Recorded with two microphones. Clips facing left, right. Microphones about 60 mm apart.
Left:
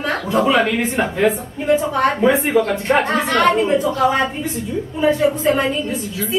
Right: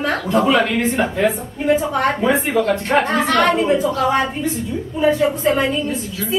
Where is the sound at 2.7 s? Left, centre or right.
Centre.